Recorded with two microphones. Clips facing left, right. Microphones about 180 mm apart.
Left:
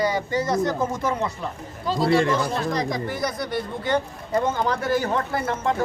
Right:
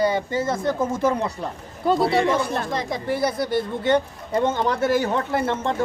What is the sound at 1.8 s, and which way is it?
Speech, 55° right (ahead or behind).